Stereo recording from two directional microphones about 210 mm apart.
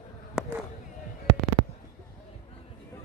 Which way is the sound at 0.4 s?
5° right (ahead or behind).